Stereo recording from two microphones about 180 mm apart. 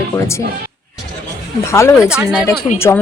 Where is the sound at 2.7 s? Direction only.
15° left (ahead or behind).